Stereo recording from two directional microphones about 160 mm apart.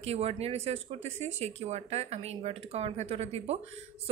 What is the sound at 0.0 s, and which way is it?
Speech, 40° right (ahead or behind).